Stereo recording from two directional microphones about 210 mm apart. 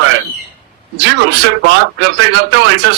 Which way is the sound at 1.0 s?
55° right (ahead or behind).